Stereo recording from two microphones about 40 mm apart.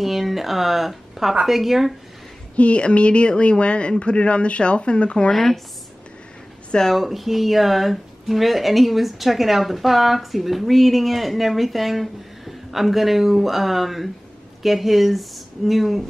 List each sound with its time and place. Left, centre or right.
0.0 s speech: centre
2.5 s speech: left
5.3 s speech: centre
7.0 s speech: centre